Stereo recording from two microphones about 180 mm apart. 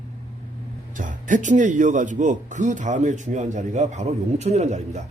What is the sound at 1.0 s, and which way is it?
Speech, 45° right (ahead or behind).